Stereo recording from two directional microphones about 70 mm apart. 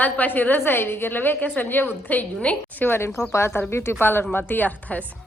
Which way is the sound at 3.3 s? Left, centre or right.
Left.